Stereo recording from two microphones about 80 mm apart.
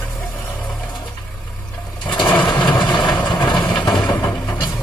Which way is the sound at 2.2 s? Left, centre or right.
Left.